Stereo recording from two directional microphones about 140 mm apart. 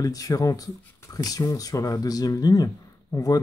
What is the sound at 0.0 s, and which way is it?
Speech, 25° left (ahead or behind).